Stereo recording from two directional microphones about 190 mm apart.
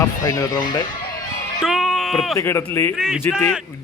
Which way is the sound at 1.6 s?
Centre (ahead or behind).